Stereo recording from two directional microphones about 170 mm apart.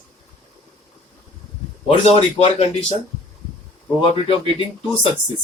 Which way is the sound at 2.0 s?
40° left (ahead or behind).